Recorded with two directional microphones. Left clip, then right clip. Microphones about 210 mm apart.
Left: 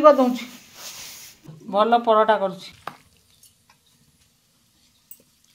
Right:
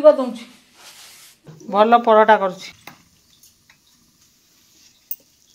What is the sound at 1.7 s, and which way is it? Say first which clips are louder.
Speech: right 4 dB; 15° right (ahead or behind).